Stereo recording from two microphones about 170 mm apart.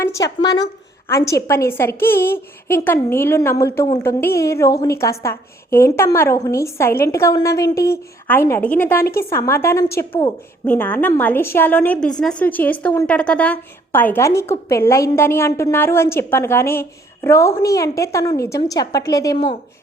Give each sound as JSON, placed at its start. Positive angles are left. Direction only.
{"t": 0.0, "sound": "a woman's voice", "side_deg": 20}